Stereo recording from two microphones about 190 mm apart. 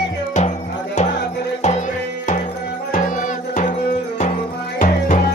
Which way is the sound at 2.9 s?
45° left (ahead or behind).